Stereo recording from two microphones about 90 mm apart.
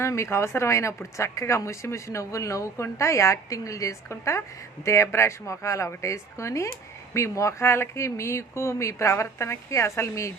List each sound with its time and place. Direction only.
0.0 s speech: 30° left (ahead or behind)